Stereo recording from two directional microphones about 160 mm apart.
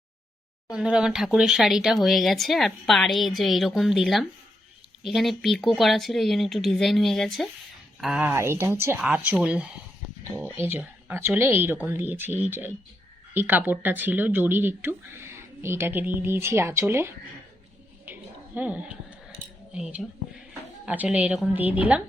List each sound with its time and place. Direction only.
0.7 s speech: 5° right (ahead or behind)
8.3 s speech: 15° right (ahead or behind)
18.0 s dog: 10° right (ahead or behind)
19.7 s speech: 5° right (ahead or behind)